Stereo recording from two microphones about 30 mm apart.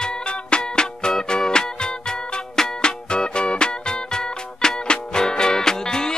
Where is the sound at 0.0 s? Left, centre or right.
Left.